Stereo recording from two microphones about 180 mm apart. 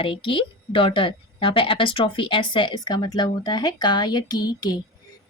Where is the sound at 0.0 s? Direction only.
30° left (ahead or behind).